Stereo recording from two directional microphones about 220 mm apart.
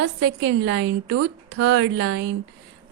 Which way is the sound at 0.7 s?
90° right.